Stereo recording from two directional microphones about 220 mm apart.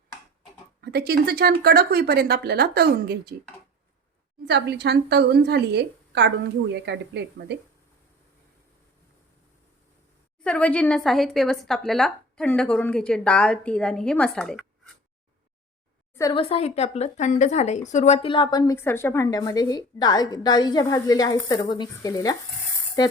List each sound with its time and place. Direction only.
0.8 s a woman's voice: 45° right (ahead or behind)
4.4 s a woman's voice: 50° right (ahead or behind)
10.4 s a woman's voice: 5° left (ahead or behind)
16.1 s speech: 20° left (ahead or behind)